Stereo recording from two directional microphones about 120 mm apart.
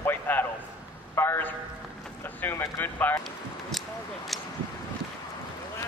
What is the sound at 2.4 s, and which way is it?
Speech, 20° left (ahead or behind).